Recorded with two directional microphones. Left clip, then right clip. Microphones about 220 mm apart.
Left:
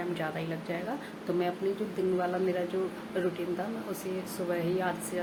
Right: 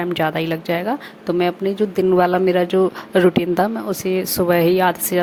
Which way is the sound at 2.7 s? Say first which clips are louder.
Right 16 dB; 45° right (ahead or behind).